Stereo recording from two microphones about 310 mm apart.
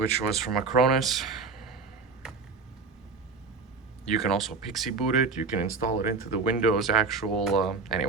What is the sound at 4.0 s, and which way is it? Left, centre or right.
Speech, centre.